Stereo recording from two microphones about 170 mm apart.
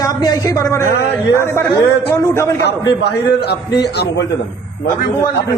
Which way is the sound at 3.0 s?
75° left (ahead or behind).